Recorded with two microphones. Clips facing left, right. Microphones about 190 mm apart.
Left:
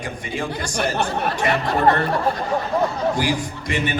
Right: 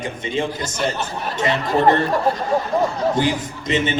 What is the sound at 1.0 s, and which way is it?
Speech, 60° left (ahead or behind).